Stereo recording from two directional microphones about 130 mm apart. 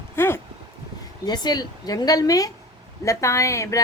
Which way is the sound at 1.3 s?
30° left (ahead or behind).